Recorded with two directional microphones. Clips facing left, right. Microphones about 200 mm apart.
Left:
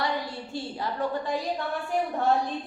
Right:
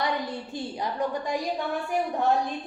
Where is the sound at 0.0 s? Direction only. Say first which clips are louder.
Right 1 dB; 15° right (ahead or behind).